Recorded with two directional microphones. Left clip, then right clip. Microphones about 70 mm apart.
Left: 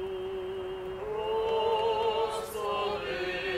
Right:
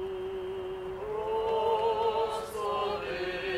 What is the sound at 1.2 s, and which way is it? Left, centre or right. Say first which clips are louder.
Music: even; left.